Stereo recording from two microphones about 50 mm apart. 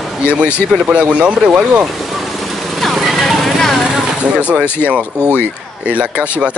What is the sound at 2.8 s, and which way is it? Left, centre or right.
Music, centre.